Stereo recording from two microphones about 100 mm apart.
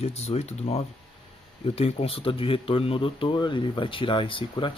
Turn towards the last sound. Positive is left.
turn(degrees=60)  # may be behind; listen again after turning